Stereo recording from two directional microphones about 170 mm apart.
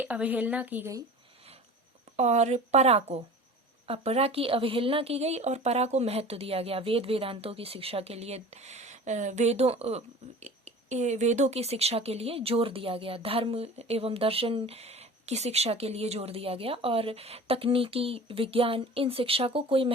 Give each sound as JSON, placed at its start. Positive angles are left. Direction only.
{"t": 0.0, "sound": "a woman's voice", "side_deg": -10}
{"t": 2.1, "sound": "speech", "side_deg": -40}